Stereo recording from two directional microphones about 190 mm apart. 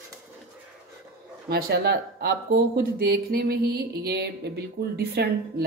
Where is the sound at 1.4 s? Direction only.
55° right (ahead or behind).